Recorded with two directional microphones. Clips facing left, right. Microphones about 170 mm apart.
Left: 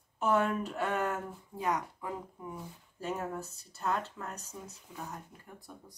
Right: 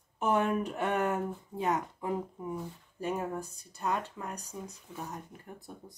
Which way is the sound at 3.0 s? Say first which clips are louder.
Right 3 dB; 15° right (ahead or behind).